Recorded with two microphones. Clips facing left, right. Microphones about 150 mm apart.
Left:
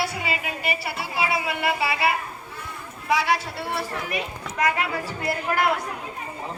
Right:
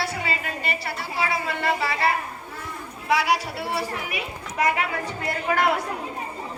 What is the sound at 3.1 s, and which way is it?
Speech, 5° right (ahead or behind).